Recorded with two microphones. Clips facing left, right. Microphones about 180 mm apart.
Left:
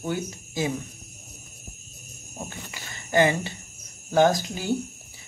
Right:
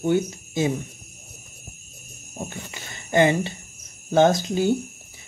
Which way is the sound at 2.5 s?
20° right (ahead or behind).